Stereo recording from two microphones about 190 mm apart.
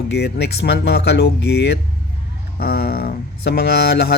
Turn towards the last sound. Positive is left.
turn(degrees=60)  # may be behind; listen again after turning